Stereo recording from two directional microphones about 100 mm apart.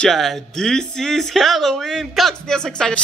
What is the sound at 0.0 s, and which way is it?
Speech, centre (ahead or behind).